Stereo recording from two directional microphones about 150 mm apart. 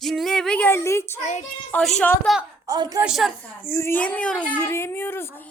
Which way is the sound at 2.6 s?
25° right (ahead or behind).